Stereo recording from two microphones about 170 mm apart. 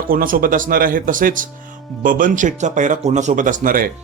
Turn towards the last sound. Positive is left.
turn(degrees=-55)  # may be behind; listen again after turning